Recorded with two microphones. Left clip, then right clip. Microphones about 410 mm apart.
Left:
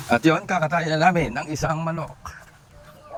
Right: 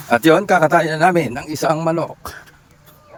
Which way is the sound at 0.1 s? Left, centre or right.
Centre.